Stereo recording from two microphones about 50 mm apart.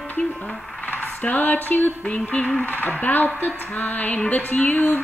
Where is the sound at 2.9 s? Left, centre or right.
Left.